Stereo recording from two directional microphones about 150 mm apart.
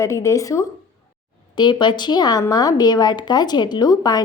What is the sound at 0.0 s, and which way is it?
Speech, 20° left (ahead or behind).